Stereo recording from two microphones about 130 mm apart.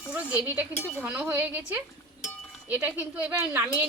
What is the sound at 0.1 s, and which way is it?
Speech, 10° right (ahead or behind).